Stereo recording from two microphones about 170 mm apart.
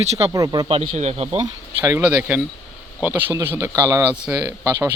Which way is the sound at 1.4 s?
20° right (ahead or behind).